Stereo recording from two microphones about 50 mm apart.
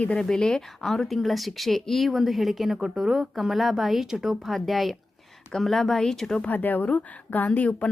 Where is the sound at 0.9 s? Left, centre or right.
Centre.